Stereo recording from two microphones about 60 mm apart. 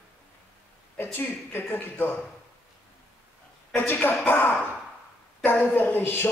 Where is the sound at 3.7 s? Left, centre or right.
Left.